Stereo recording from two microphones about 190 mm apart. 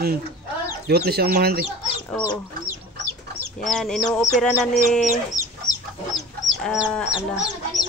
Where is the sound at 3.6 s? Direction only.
Centre (ahead or behind).